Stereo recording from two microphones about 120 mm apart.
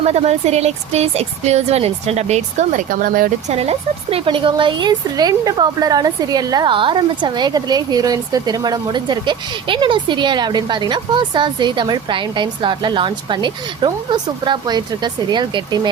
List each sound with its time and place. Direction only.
0.0 s speech: 65° right (ahead or behind)
4.3 s a woman's voice: 45° right (ahead or behind)